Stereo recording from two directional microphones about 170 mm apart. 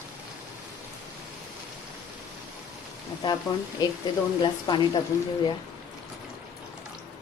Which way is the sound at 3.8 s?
25° left (ahead or behind).